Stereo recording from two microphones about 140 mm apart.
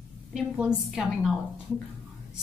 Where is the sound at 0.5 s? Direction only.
5° right (ahead or behind).